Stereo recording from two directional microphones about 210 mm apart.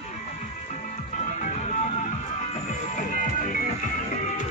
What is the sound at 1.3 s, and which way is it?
Music, 35° left (ahead or behind).